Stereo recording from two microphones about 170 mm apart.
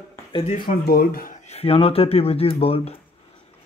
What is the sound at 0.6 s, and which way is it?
Speech, 60° left (ahead or behind).